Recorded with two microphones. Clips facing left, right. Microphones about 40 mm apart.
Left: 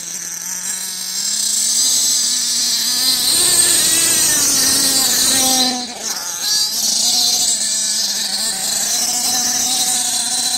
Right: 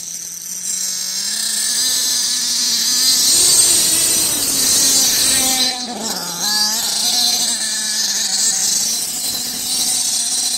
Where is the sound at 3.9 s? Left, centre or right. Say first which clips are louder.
Left 2 dB; left.